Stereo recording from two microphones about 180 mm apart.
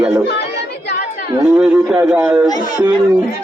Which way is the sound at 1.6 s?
5° right (ahead or behind).